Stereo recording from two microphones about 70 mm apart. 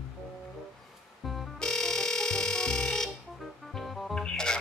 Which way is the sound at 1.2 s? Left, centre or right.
Centre.